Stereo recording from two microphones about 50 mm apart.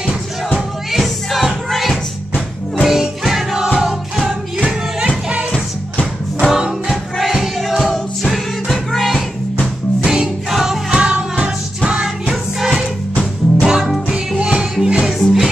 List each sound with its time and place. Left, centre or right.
0.9 s music: centre
4.6 s music: centre
5.5 s music: centre
6.5 s music: centre
10.0 s music: centre
13.1 s music: left
13.7 s music: centre
14.4 s music: centre